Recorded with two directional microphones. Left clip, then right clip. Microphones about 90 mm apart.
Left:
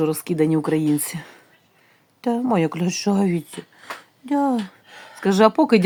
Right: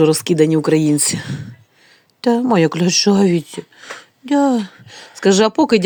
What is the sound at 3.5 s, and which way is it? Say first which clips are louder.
A woman's voice: right 4 dB; 15° right (ahead or behind).